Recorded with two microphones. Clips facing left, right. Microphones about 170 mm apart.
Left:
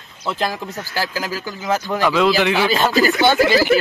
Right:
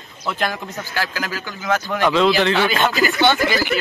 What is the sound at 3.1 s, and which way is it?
Speech, 10° left (ahead or behind).